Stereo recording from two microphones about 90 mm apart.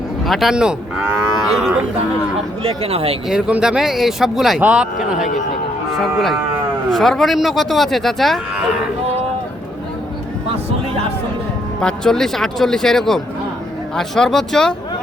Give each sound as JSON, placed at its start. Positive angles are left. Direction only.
{"t": 0.3, "sound": "speech", "side_deg": 0}
{"t": 2.6, "sound": "speech", "side_deg": -90}
{"t": 3.2, "sound": "speech", "side_deg": -10}
{"t": 4.6, "sound": "speech", "side_deg": -10}
{"t": 5.9, "sound": "speech", "side_deg": 0}
{"t": 11.8, "sound": "speech", "side_deg": 10}